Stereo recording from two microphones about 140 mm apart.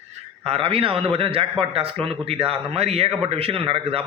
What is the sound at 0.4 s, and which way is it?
A man's voice, 45° right (ahead or behind).